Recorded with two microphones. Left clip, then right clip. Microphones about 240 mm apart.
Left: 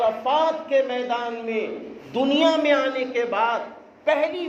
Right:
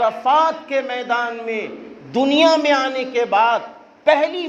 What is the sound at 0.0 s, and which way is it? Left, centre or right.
A man's voice, right.